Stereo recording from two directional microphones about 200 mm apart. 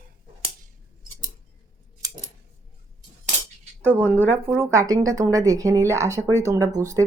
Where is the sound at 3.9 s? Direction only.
10° right (ahead or behind).